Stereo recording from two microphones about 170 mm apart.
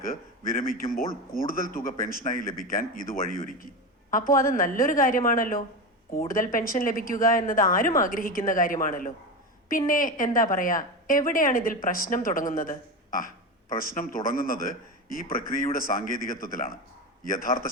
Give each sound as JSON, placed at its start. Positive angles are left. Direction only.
{"t": 0.0, "sound": "a man's voice", "side_deg": 55}